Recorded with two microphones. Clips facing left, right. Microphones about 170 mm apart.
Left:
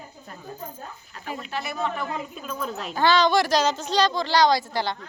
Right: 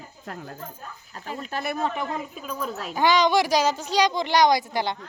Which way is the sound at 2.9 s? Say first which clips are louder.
Even; 15° right (ahead or behind).